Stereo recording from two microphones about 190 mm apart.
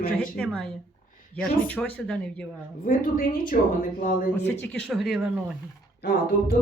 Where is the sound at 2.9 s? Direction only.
45° left (ahead or behind).